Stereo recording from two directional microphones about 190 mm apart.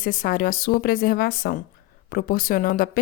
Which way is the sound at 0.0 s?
50° left (ahead or behind).